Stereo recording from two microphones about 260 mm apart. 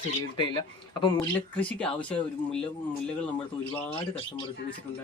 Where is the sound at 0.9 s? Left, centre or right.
Centre.